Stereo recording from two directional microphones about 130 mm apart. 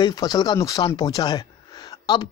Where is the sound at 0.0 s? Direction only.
30° left (ahead or behind).